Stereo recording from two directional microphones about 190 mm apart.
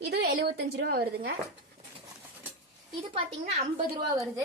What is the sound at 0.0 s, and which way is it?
A woman's voice, 60° right (ahead or behind).